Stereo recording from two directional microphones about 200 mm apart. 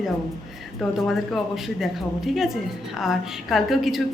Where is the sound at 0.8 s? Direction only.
Centre (ahead or behind).